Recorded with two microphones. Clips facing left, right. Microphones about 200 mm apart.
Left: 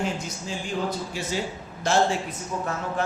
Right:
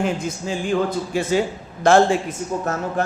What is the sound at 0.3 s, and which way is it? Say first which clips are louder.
A man's voice: right 9 dB; 55° right (ahead or behind).